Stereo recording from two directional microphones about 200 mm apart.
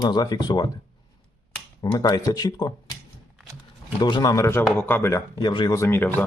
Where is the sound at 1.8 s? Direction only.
20° left (ahead or behind).